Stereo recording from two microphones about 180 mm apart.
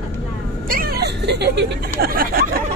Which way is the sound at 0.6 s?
55° right (ahead or behind).